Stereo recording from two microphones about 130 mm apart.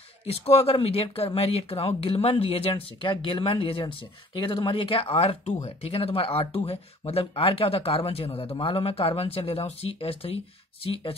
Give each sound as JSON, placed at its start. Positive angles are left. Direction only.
{"t": 0.5, "sound": "speech", "side_deg": 50}